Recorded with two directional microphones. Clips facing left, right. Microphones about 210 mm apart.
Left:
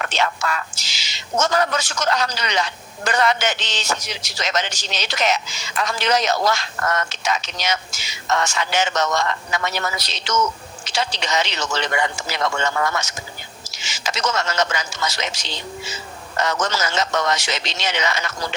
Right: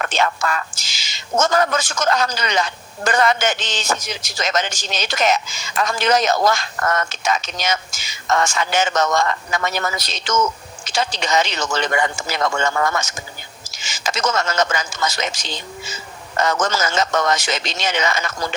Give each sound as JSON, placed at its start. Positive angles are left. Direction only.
{"t": 0.0, "sound": "speech", "side_deg": -50}